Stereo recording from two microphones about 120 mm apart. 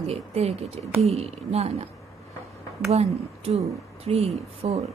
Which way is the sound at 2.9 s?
60° right (ahead or behind).